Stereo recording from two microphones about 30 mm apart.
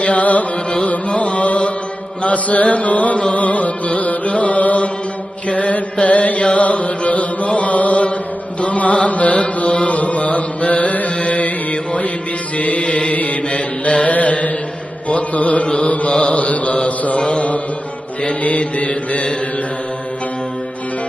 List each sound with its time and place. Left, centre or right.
0.0 s carnatic music: left
0.9 s music: left
5.5 s chant: left
6.6 s music: left
13.5 s mantra: left
15.1 s music: left
15.6 s mantra: left
15.9 s mantra: left
18.4 s music: left